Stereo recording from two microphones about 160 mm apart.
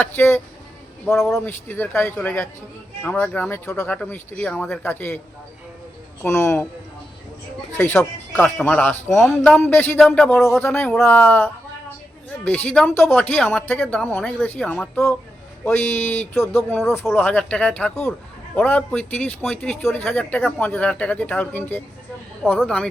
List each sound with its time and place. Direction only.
0.0 s speech: 10° left (ahead or behind)
1.5 s speech: 15° left (ahead or behind)
6.2 s speech: 15° left (ahead or behind)
7.8 s speech: 10° left (ahead or behind)
10.0 s speech: centre (ahead or behind)
12.6 s speech: 5° left (ahead or behind)